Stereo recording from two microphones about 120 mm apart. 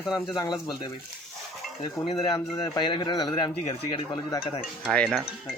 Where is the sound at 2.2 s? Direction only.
40° left (ahead or behind).